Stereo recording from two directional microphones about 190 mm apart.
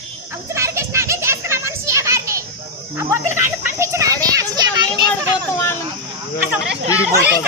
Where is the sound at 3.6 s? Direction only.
15° right (ahead or behind).